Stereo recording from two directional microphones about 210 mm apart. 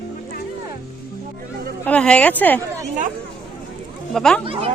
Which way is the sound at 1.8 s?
5° left (ahead or behind).